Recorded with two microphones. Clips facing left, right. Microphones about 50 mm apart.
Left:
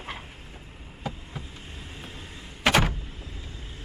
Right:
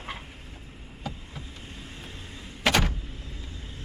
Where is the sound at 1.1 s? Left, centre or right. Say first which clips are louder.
Left 2 dB; centre.